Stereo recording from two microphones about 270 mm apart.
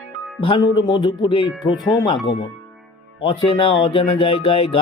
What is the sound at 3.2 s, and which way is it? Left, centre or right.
Speech, centre.